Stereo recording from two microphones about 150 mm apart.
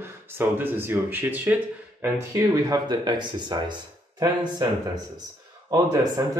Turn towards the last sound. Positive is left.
turn(degrees=-20)  # may be behind; listen again after turning